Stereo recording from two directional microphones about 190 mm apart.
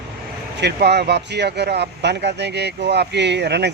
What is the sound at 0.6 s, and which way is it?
Speech, 60° right (ahead or behind).